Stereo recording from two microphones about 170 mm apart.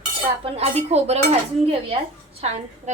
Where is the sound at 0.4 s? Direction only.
35° right (ahead or behind).